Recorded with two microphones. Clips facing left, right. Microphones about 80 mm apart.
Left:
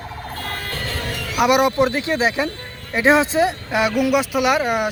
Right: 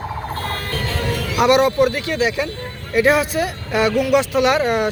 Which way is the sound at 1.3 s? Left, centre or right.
Centre.